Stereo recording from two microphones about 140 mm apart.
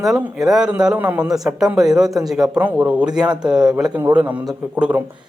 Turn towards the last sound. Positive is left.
turn(degrees=-10)  # may be behind; listen again after turning